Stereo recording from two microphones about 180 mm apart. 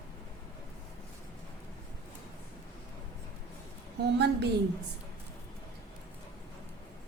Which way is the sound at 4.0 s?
70° right (ahead or behind).